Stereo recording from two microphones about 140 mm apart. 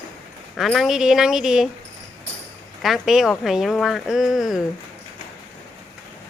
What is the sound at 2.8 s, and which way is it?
Speech, centre (ahead or behind).